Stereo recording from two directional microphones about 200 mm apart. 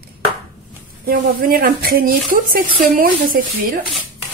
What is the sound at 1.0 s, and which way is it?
Speech, 45° right (ahead or behind).